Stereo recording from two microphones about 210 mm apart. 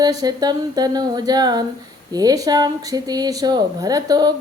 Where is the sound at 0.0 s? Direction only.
20° right (ahead or behind).